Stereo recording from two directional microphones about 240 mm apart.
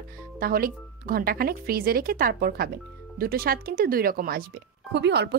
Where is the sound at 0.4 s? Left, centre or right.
Right.